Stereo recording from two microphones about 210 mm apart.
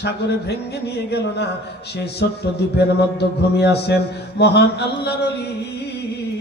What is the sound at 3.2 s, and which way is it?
A man's voice, 50° left (ahead or behind).